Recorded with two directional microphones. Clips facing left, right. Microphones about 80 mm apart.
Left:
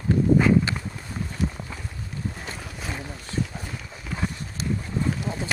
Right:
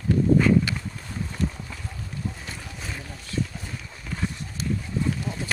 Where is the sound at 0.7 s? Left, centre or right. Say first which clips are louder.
Left 1 dB; left.